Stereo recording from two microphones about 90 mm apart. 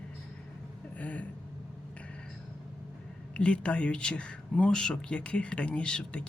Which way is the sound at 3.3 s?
10° left (ahead or behind).